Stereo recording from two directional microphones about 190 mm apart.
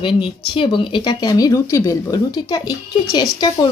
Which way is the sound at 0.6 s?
25° left (ahead or behind).